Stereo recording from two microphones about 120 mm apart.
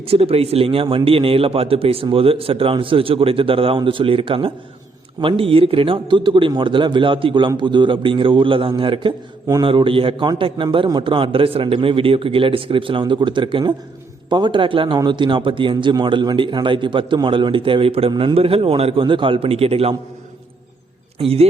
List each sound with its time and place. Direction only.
0.1 s a man's voice: 55° right (ahead or behind)
18.1 s a man's voice: 40° right (ahead or behind)
18.3 s a man's voice: 50° right (ahead or behind)
21.2 s a man's voice: 55° right (ahead or behind)